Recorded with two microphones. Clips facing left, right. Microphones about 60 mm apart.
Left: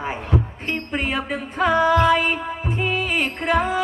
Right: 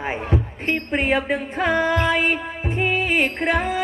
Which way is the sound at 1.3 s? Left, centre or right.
Right.